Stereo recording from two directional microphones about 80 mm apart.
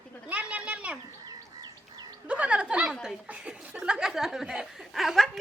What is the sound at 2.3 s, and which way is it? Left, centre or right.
A woman's voice, centre.